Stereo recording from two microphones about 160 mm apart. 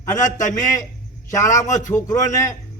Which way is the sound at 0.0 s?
20° left (ahead or behind).